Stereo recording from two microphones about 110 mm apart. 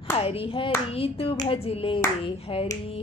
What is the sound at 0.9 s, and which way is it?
Speech, 60° left (ahead or behind).